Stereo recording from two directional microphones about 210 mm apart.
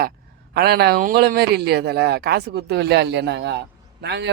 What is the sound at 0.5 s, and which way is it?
Speech, 50° right (ahead or behind).